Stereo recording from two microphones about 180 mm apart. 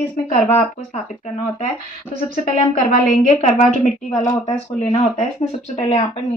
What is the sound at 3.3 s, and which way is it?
A woman's voice, 40° left (ahead or behind).